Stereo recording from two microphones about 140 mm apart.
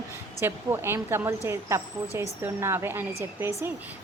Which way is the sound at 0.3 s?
20° right (ahead or behind).